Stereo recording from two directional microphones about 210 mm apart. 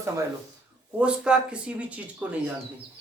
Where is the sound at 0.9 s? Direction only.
5° right (ahead or behind).